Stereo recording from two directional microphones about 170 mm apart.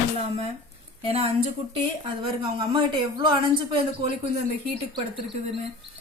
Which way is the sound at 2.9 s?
30° right (ahead or behind).